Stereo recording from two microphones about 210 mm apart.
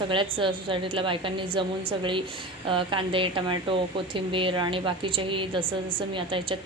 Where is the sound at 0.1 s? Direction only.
25° right (ahead or behind).